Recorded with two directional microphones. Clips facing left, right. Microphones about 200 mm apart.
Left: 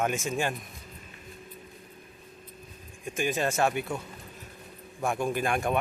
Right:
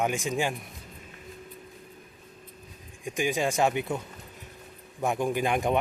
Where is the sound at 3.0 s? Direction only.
15° right (ahead or behind).